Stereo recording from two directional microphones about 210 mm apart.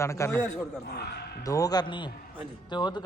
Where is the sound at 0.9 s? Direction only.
50° left (ahead or behind).